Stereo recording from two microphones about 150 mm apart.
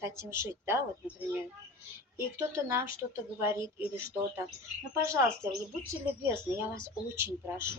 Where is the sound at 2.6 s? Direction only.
15° right (ahead or behind).